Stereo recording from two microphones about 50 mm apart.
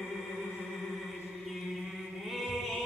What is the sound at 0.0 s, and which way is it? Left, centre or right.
Music, centre.